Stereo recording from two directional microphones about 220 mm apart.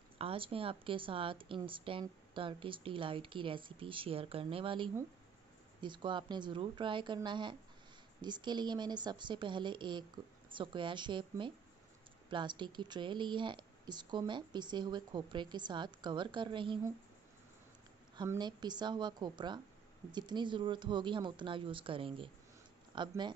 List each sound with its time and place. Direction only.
0.2 s speech: 25° right (ahead or behind)
18.1 s speech: 20° right (ahead or behind)